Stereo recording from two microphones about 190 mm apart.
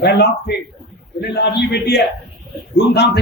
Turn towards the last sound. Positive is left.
turn(degrees=65)  # may be behind; listen again after turning